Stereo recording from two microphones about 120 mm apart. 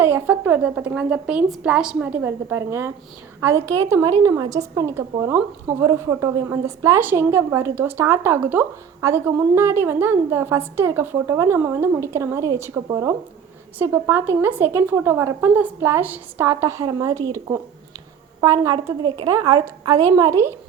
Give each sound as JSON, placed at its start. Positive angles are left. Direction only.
{"t": 0.0, "sound": "a woman's voice", "side_deg": -15}
{"t": 18.3, "sound": "a woman's voice", "side_deg": -30}
{"t": 19.0, "sound": "a woman's voice", "side_deg": -40}
{"t": 19.3, "sound": "a woman's voice", "side_deg": -30}